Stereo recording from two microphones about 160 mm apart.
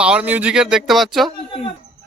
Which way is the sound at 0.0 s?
5° right (ahead or behind).